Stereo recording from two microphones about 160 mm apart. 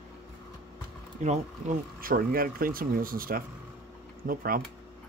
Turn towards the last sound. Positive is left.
turn(degrees=-65)  # may be behind; listen again after turning